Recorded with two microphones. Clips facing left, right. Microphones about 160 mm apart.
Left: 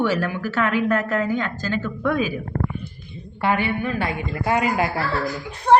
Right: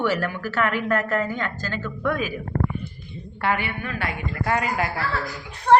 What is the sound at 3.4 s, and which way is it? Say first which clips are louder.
A woman's voice: left 4 dB; 20° left (ahead or behind).